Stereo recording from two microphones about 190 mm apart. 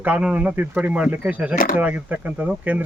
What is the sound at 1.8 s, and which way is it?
Speech, 10° right (ahead or behind).